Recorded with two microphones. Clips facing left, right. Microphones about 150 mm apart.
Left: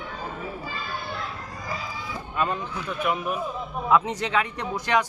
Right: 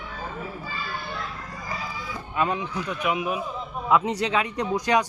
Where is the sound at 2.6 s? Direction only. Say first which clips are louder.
Right 1 dB; 5° right (ahead or behind).